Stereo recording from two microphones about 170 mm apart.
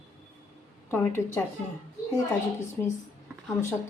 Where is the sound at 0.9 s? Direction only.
10° left (ahead or behind).